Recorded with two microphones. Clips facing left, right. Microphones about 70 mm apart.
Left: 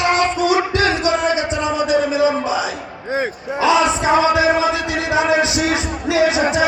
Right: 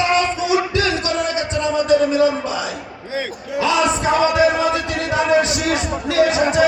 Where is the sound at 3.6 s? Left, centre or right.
Left.